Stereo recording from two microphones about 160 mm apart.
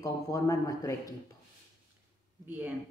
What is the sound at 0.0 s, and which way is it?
Speech, 20° left (ahead or behind).